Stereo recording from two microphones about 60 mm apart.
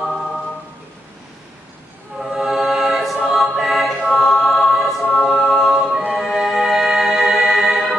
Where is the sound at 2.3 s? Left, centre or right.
Centre.